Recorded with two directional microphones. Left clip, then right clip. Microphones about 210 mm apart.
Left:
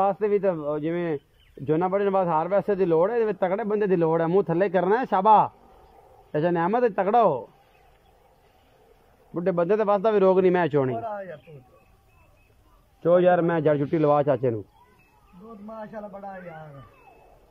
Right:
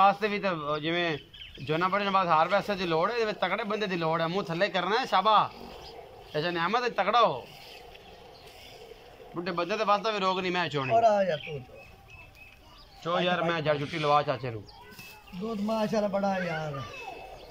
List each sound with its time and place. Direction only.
0.0 s a man's voice: 40° left (ahead or behind)
9.3 s speech: 50° left (ahead or behind)
10.9 s speech: 5° right (ahead or behind)
13.0 s speech: 45° left (ahead or behind)
15.6 s speech: 10° right (ahead or behind)